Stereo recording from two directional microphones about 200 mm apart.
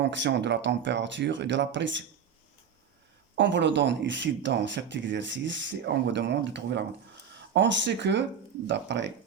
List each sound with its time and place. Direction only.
0.0 s speech: 60° right (ahead or behind)
3.3 s speech: 65° right (ahead or behind)